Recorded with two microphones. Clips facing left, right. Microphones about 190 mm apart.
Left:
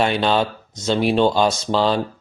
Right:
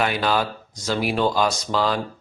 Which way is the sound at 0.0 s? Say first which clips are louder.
Left 4 dB; 25° left (ahead or behind).